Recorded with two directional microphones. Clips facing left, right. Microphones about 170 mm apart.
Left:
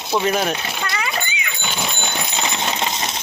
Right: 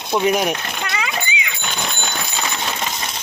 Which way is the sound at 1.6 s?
5° left (ahead or behind).